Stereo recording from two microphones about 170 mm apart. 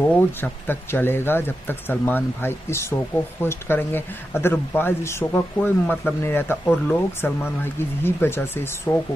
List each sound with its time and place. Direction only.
0.1 s speech: 10° left (ahead or behind)